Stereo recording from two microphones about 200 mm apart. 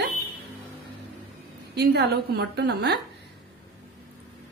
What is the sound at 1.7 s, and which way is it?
Speech, 55° right (ahead or behind).